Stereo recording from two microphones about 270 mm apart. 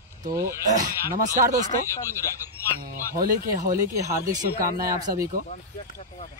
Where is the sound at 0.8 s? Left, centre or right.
Right.